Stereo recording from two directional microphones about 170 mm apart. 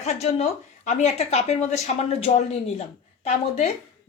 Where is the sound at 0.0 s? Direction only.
40° left (ahead or behind).